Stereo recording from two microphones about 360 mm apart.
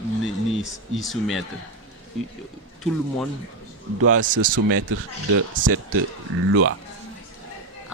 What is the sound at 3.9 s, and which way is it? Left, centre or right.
Speech, right.